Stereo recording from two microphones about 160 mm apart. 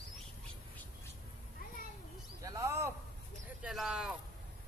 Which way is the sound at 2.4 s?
20° right (ahead or behind).